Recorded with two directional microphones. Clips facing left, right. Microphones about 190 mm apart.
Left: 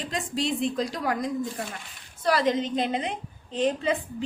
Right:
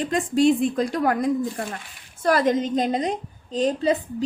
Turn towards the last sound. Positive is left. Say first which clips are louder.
# right 5 dB
turn(degrees=-35)  # may be behind; listen again after turning